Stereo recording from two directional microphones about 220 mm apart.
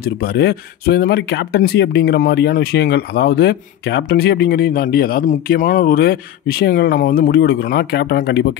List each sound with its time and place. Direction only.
0.0 s speech: 45° left (ahead or behind)